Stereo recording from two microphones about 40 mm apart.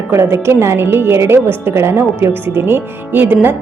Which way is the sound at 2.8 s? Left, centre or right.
Right.